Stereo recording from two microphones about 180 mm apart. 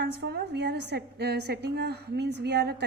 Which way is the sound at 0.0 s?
65° right (ahead or behind).